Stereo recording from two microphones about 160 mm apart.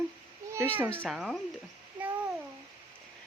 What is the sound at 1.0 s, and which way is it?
Speech, centre (ahead or behind).